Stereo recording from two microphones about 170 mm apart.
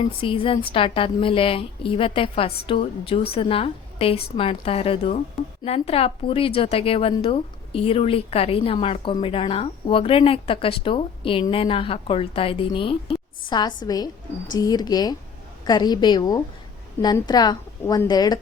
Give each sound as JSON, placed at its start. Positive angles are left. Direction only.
{"t": 0.0, "sound": "a woman's voice", "side_deg": 30}